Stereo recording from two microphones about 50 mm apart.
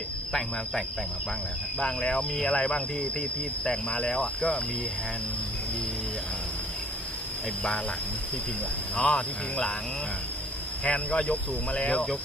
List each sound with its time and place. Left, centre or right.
0.3 s cricket: centre
1.8 s cricket: centre
9.0 s cricket: centre
10.8 s speech: left